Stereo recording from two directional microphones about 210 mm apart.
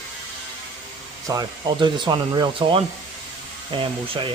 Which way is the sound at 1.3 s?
20° right (ahead or behind).